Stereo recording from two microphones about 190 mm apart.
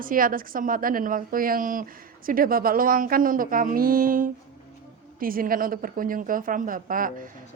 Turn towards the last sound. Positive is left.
turn(degrees=-45)  # may be behind; listen again after turning